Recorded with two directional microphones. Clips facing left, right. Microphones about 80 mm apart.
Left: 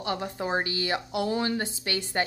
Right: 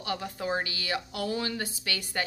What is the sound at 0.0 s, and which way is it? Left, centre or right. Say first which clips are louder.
A woman's voice: left 3 dB; left.